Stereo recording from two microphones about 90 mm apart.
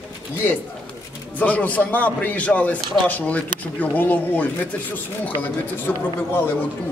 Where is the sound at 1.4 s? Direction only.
20° left (ahead or behind).